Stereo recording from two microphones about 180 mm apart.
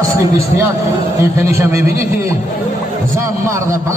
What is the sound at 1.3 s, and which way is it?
Speech, 15° right (ahead or behind).